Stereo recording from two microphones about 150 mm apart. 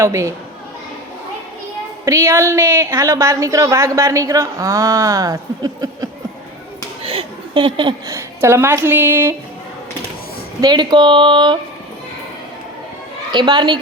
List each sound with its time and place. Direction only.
0.0 s a woman's voice: 20° right (ahead or behind)
2.0 s a woman's voice: 20° right (ahead or behind)
7.0 s speech: 40° right (ahead or behind)
8.1 s speech: 15° right (ahead or behind)
10.6 s speech: 30° right (ahead or behind)
13.3 s a woman's voice: 30° right (ahead or behind)